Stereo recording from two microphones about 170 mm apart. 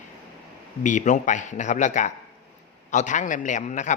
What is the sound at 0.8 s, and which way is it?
A man's voice, 45° left (ahead or behind).